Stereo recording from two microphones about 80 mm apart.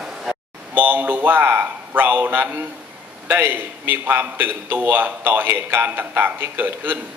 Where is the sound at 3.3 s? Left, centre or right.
Right.